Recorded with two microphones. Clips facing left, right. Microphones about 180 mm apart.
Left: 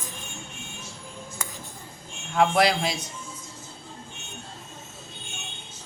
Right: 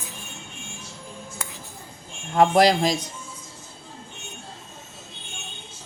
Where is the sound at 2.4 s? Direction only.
40° right (ahead or behind).